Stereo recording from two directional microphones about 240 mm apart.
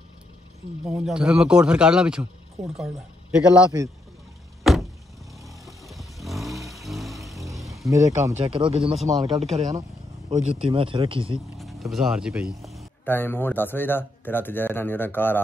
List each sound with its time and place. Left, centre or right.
0.8 s speech: centre
4.7 s vehicle: centre
7.9 s speech: centre
8.4 s speech: right
11.5 s speech: centre